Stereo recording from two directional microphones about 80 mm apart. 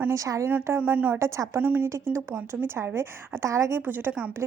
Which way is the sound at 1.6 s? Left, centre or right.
Right.